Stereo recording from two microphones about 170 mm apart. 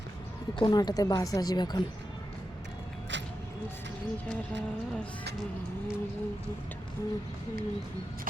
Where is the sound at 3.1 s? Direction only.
90° right.